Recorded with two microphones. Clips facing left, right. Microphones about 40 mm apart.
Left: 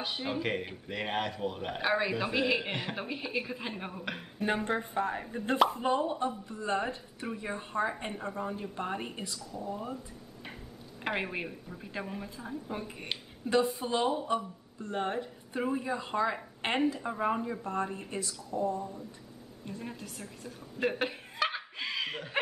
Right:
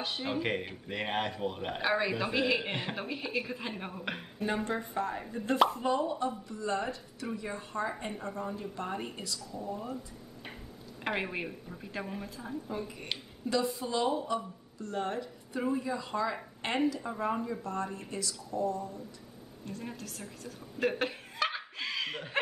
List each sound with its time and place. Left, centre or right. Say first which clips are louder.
0.0 s a man's voice: even; centre
4.6 s speech: left 2 dB; left
11.1 s a man's voice: even; centre
12.7 s a woman's voice: even; left
17.0 s speech: left 2 dB; centre
19.8 s chuckle: even; centre